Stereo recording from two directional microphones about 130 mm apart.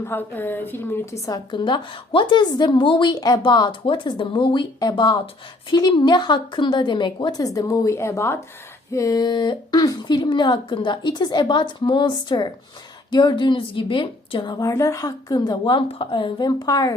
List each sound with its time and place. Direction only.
0.0 s a woman's voice: 15° left (ahead or behind); by 14.7 s 35° left (ahead or behind)
14.7 s a woman's voice: 25° left (ahead or behind)